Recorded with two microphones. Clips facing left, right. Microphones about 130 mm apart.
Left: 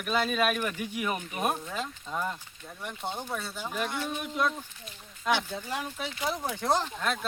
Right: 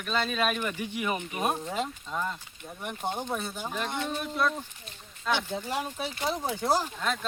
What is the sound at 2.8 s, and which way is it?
Speech, 15° right (ahead or behind).